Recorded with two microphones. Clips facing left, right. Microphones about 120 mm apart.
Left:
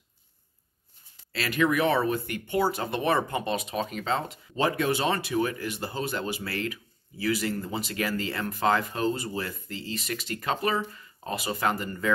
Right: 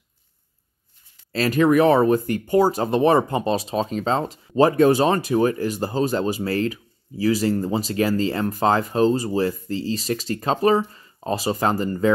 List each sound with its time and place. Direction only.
1.3 s speech: 40° right (ahead or behind)